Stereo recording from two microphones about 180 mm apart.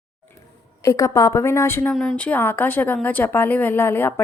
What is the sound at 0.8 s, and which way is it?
Speech, 15° left (ahead or behind).